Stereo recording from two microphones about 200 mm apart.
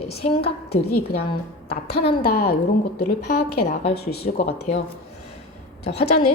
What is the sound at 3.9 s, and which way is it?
Speech, 50° left (ahead or behind).